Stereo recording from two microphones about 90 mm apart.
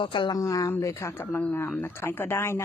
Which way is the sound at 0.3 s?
40° left (ahead or behind).